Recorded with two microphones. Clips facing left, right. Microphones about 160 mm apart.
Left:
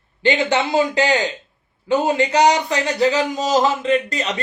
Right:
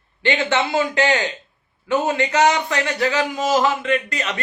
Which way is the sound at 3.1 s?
20° left (ahead or behind).